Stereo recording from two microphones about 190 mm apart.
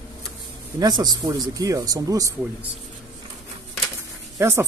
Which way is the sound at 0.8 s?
20° right (ahead or behind).